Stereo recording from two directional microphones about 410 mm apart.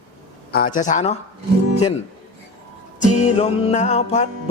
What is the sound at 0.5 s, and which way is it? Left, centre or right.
Speech, centre.